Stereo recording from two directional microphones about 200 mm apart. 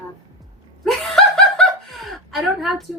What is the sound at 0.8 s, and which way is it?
Snicker, centre (ahead or behind).